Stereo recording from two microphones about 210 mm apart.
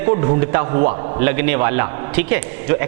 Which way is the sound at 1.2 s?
15° right (ahead or behind).